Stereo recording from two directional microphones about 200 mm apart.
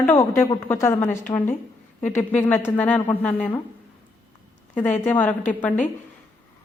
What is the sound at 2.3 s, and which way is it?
A woman's voice, 10° left (ahead or behind).